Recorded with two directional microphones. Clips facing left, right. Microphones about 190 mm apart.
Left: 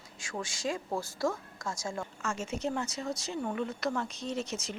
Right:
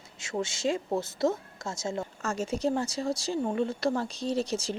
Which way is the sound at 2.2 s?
35° right (ahead or behind).